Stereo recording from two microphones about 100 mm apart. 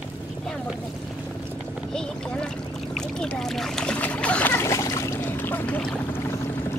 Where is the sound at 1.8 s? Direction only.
5° left (ahead or behind).